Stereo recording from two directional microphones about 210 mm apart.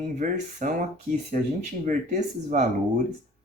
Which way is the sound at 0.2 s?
40° right (ahead or behind).